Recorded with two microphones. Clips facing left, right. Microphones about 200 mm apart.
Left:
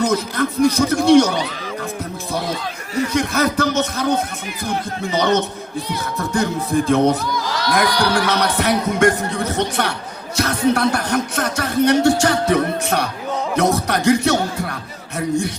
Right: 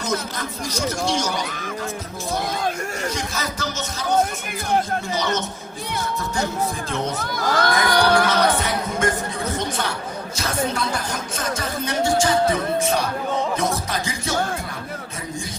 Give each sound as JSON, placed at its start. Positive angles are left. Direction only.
{"t": 0.0, "sound": "speech", "side_deg": 60}
{"t": 2.5, "sound": "chatter", "side_deg": -50}
{"t": 3.1, "sound": "speech", "side_deg": 60}
{"t": 7.3, "sound": "a sound", "side_deg": -50}
{"t": 7.9, "sound": "speech", "side_deg": -55}
{"t": 8.3, "sound": "speech", "side_deg": 70}